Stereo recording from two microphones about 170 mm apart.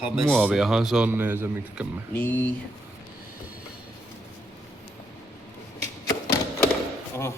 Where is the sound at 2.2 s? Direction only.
10° left (ahead or behind).